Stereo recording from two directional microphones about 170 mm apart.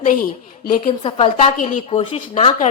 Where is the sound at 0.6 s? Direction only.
60° left (ahead or behind).